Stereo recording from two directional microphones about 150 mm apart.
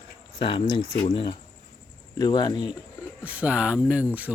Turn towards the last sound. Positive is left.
turn(degrees=-10)  # may be behind; listen again after turning